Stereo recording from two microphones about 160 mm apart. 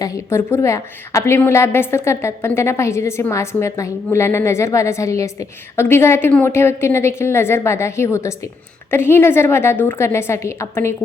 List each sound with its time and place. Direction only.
0.0 s a woman's voice: 20° left (ahead or behind)